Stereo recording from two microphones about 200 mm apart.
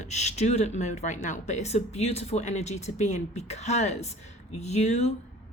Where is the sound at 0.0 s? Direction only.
35° left (ahead or behind).